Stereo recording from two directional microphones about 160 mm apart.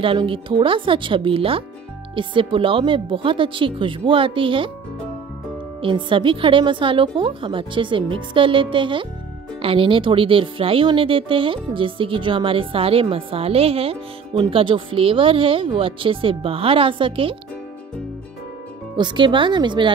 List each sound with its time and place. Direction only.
0.0 s speech: 35° right (ahead or behind)
5.8 s speech: 30° right (ahead or behind)
18.9 s speech: 30° right (ahead or behind)